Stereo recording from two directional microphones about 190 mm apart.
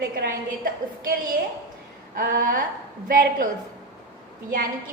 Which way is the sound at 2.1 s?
45° right (ahead or behind).